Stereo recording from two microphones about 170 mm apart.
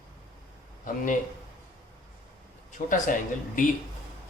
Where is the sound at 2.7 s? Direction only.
50° left (ahead or behind).